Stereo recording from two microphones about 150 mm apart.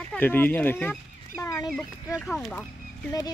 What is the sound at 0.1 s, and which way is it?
Speech, 10° left (ahead or behind).